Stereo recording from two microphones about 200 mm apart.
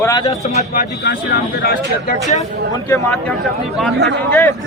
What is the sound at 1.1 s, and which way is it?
Speech, 55° left (ahead or behind).